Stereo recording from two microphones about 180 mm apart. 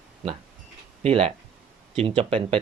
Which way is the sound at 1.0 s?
30° right (ahead or behind).